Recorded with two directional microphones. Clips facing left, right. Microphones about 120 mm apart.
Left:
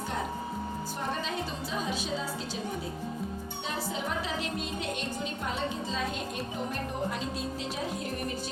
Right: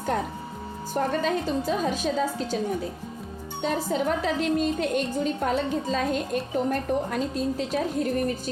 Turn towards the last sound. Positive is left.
turn(degrees=-45)  # may be behind; listen again after turning